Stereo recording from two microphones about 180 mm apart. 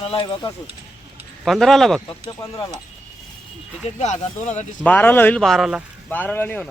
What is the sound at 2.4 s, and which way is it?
Speech, 20° left (ahead or behind).